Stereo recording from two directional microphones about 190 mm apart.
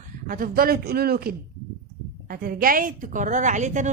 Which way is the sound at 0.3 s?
45° right (ahead or behind).